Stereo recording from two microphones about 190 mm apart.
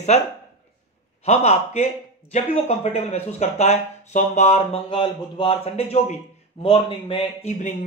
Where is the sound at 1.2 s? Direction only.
35° left (ahead or behind).